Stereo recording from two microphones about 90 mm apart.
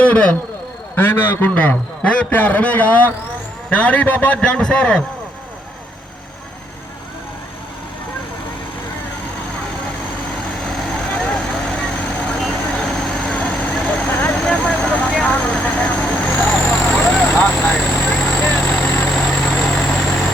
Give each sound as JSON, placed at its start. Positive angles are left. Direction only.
{"t": 0.0, "sound": "a man's voice", "side_deg": 15}
{"t": 0.9, "sound": "a man's voice", "side_deg": 25}
{"t": 10.5, "sound": "vehicle", "side_deg": 0}
{"t": 14.2, "sound": "vehicle", "side_deg": 20}